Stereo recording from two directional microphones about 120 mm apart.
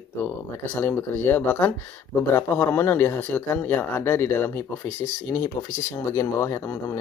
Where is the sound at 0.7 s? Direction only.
15° left (ahead or behind).